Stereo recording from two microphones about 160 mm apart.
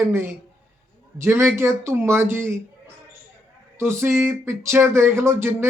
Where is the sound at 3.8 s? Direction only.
15° right (ahead or behind).